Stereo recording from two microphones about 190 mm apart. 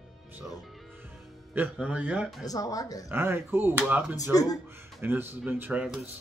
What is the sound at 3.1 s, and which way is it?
Speech, 10° right (ahead or behind).